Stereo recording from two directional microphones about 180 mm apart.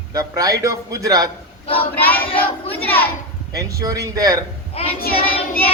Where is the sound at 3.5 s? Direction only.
20° right (ahead or behind).